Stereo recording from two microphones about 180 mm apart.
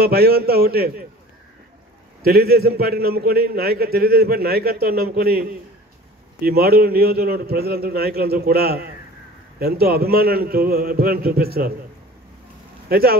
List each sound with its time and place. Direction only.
0.0 s a man's voice: 60° right (ahead or behind)
2.2 s a man's voice: 60° right (ahead or behind)
12.8 s speech: 60° right (ahead or behind)